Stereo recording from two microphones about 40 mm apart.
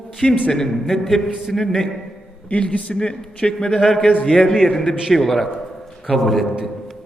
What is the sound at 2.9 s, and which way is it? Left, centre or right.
A man's voice, left.